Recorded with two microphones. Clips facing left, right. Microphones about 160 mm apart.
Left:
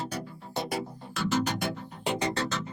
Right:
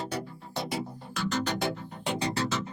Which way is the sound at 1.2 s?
Centre (ahead or behind).